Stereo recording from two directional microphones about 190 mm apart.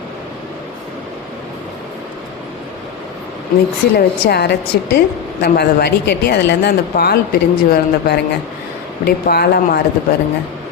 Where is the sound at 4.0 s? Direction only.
55° left (ahead or behind).